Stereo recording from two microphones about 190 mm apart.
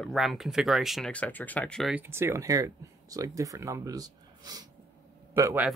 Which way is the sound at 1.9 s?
10° right (ahead or behind).